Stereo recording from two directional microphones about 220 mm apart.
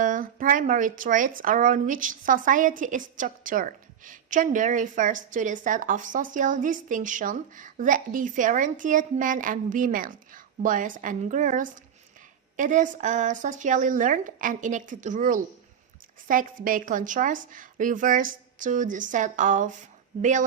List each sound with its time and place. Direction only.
0.0 s speech: 40° right (ahead or behind)